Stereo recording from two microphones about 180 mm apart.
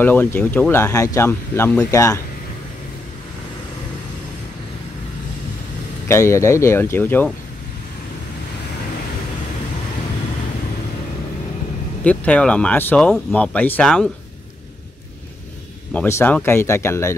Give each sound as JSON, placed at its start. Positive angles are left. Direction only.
{"t": 0.0, "sound": "speech", "side_deg": 10}
{"t": 6.0, "sound": "speech", "side_deg": 15}
{"t": 12.0, "sound": "speech", "side_deg": 5}
{"t": 15.9, "sound": "speech", "side_deg": 10}